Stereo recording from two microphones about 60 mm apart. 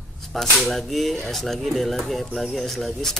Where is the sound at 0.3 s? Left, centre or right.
Centre.